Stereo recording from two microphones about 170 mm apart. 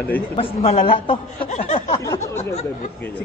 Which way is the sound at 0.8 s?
30° left (ahead or behind).